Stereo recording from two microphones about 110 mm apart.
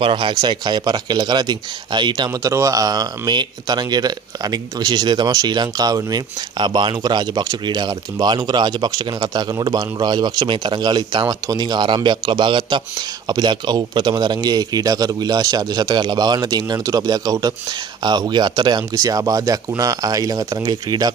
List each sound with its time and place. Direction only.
0.0 s speech: 50° right (ahead or behind)
2.4 s speech: 30° right (ahead or behind)